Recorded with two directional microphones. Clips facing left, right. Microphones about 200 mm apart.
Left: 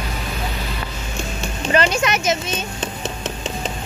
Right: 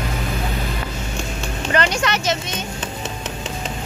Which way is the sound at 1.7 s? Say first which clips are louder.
Left 2 dB; 20° left (ahead or behind).